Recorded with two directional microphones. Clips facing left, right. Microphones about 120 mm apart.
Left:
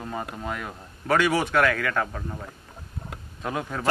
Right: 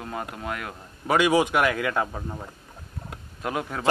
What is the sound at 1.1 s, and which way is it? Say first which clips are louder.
Speech: right 2 dB; 15° right (ahead or behind).